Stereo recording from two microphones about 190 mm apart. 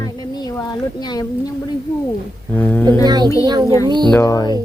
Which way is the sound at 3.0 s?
20° right (ahead or behind).